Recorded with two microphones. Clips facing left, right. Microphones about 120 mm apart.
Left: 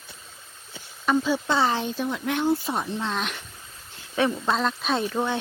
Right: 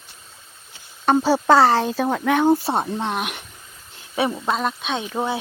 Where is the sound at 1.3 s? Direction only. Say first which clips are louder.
Right 8 dB; 90° right; by 2.5 s 60° right (ahead or behind).